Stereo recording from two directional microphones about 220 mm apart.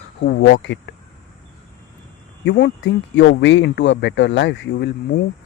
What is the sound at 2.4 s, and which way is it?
Speech, 50° left (ahead or behind).